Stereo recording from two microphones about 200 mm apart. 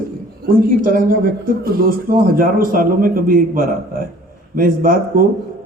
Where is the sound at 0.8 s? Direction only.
45° right (ahead or behind).